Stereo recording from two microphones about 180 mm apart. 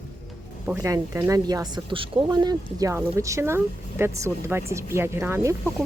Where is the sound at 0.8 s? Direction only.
15° right (ahead or behind).